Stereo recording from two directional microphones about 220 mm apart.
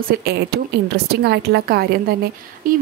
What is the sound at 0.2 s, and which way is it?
A woman's voice, 45° right (ahead or behind).